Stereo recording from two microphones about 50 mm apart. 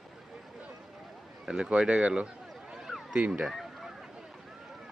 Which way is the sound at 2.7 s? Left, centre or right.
Centre.